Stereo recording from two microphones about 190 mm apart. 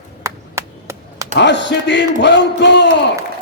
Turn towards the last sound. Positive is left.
turn(degrees=65)  # may be behind; listen again after turning